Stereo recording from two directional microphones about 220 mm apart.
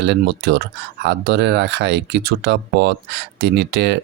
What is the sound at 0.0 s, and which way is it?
Speech, 50° right (ahead or behind).